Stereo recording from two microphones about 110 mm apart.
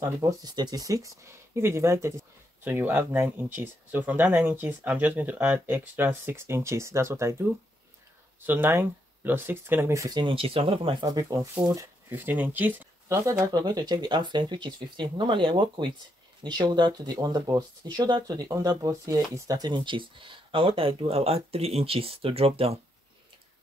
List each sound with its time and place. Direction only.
0.0 s speech: 35° right (ahead or behind)
8.5 s speech: 20° right (ahead or behind)
9.9 s speech: 35° right (ahead or behind)
10.2 s speech: 55° right (ahead or behind)
11.1 s speech: 35° right (ahead or behind)
12.1 s speech: 15° right (ahead or behind)
13.2 s speech: 30° right (ahead or behind); by 22.8 s 65° right (ahead or behind)